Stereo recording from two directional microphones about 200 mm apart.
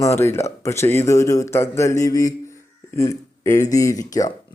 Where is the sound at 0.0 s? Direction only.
15° left (ahead or behind).